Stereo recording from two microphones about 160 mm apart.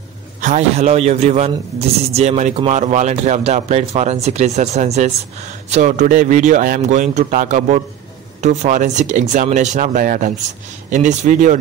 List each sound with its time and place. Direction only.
0.4 s a man's voice: 50° right (ahead or behind)